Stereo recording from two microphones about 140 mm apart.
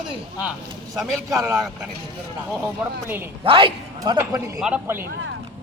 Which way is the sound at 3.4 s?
40° right (ahead or behind).